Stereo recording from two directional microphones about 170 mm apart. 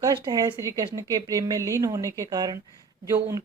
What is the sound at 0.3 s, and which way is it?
Speech, 25° right (ahead or behind).